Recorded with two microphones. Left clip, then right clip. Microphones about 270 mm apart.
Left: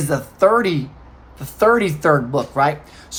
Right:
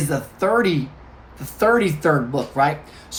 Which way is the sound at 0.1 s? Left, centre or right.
Centre.